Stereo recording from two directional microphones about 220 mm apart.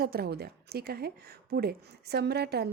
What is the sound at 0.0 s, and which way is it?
A woman's voice, 45° right (ahead or behind).